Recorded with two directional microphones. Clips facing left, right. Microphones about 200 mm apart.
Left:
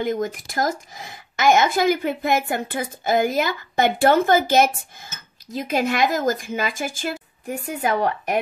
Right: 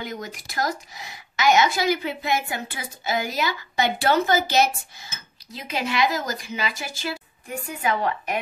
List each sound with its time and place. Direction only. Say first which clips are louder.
0.0 s a woman's voice: left 10 dB; 50° left (ahead or behind)